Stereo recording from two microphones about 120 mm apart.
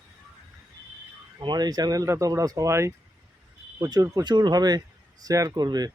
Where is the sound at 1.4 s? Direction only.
35° right (ahead or behind).